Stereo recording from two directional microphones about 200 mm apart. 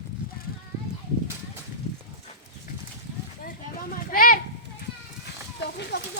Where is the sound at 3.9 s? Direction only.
45° left (ahead or behind).